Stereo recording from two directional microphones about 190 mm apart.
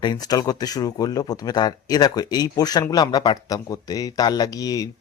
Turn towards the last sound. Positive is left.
turn(degrees=20)  # may be behind; listen again after turning